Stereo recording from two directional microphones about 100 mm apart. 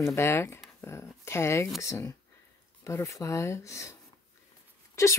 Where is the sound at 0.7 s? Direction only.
30° left (ahead or behind).